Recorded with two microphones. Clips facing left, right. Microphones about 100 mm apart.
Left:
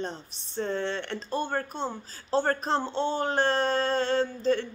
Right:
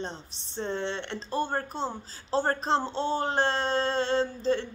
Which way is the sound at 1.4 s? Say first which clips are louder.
Right 2 dB; 35° right (ahead or behind).